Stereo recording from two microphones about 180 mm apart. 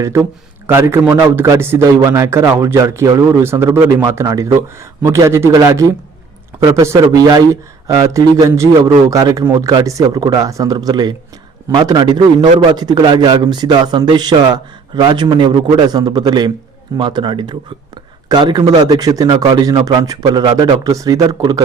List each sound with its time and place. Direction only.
0.0 s a man's voice: 15° right (ahead or behind)